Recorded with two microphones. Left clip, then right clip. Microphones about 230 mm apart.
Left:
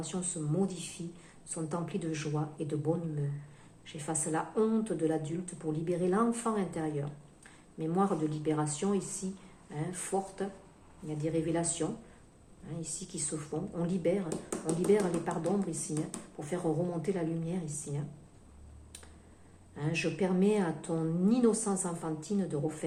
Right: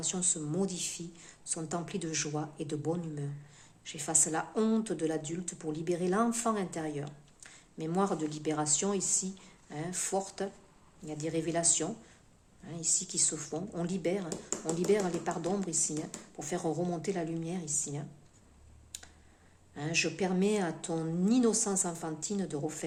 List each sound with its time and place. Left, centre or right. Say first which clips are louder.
0.0 s speech: right 4 dB; right
14.3 s speech: left 1 dB; centre
14.8 s speech: left 1 dB; right
19.7 s speech: right 2 dB; right